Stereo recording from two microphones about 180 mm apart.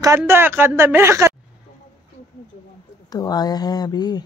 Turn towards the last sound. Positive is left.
turn(degrees=20)  # may be behind; listen again after turning